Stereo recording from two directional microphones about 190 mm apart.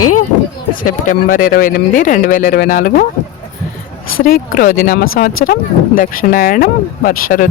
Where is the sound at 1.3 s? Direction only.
50° left (ahead or behind).